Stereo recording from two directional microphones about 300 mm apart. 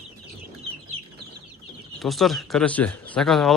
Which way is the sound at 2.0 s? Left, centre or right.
Centre.